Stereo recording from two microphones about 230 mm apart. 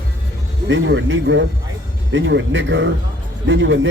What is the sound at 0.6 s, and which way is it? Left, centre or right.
A man's voice, right.